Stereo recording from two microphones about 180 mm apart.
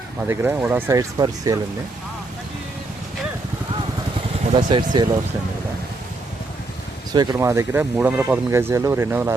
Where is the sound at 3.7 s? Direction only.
30° right (ahead or behind).